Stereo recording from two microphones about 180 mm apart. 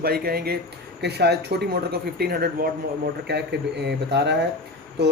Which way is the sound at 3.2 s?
70° right (ahead or behind).